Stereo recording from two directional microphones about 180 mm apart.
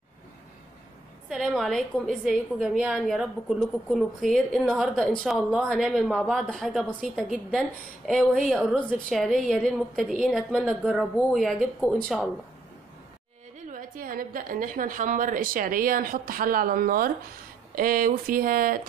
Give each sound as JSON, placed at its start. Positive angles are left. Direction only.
{"t": 1.3, "sound": "a woman's voice", "side_deg": 0}
{"t": 13.7, "sound": "a woman's voice", "side_deg": -50}